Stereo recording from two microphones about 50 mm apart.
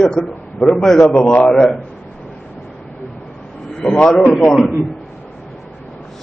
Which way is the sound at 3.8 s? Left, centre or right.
Left.